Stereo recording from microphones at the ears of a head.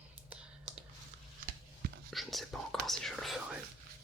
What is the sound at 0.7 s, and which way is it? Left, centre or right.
Whispering, right.